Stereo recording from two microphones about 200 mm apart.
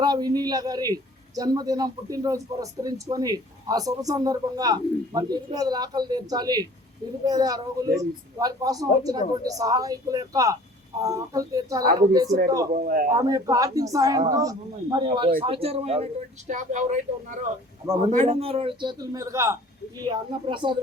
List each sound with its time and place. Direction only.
0.0 s a man's voice: 20° right (ahead or behind)
12.7 s a man's voice: 45° right (ahead or behind)
13.1 s a woman's voice: 15° right (ahead or behind)